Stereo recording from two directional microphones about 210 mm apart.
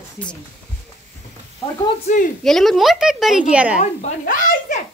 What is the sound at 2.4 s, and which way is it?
A woman's voice, centre (ahead or behind).